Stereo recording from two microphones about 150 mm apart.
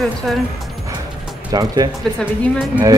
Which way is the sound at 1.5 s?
25° right (ahead or behind).